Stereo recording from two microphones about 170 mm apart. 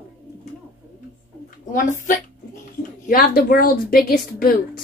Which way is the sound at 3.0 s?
55° left (ahead or behind).